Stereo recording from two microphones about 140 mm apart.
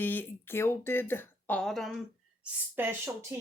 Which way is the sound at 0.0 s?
15° left (ahead or behind).